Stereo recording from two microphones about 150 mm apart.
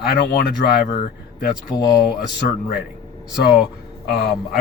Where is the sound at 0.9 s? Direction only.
65° left (ahead or behind).